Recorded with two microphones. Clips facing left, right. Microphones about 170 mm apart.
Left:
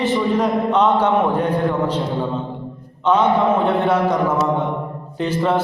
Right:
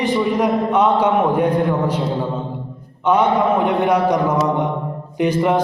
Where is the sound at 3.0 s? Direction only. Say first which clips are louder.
Even; 10° right (ahead or behind).